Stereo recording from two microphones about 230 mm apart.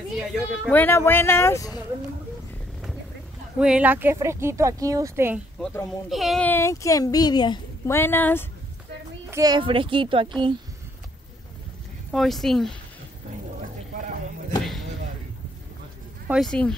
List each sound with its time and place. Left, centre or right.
0.7 s speech: centre
3.5 s speech: centre
5.6 s speech: centre
9.3 s a child's voice: centre
12.1 s speech: centre
14.6 s a sound: centre
16.3 s speech: centre